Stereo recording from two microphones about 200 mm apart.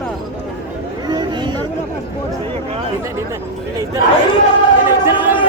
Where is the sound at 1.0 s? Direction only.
20° right (ahead or behind).